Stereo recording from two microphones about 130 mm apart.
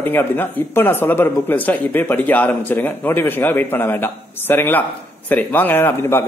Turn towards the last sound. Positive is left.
turn(degrees=15)  # may be behind; listen again after turning